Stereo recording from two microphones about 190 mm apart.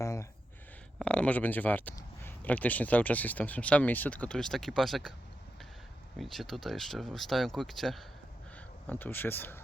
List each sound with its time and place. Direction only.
0.0 s a sound: 15° left (ahead or behind)
0.9 s speech: 5° left (ahead or behind)
6.1 s speech: centre (ahead or behind)